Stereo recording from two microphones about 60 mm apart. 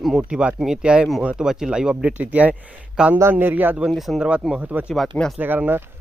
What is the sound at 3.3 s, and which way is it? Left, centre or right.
Speech, right.